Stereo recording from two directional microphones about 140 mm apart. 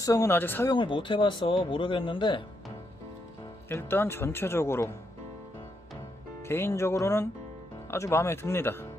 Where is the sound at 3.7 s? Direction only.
15° left (ahead or behind).